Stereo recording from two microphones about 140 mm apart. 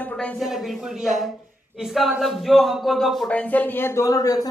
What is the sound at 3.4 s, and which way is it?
A woman's voice, 10° left (ahead or behind).